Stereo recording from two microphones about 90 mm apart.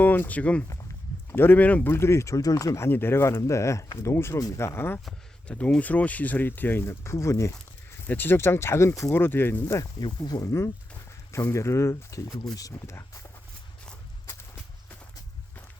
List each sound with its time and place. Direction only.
0.0 s speech: 20° left (ahead or behind)
5.5 s speech: 15° left (ahead or behind); by 7.5 s 35° left (ahead or behind)
8.0 s speech: 20° left (ahead or behind)
10.0 s speech: 50° left (ahead or behind)
11.3 s speech: 30° left (ahead or behind)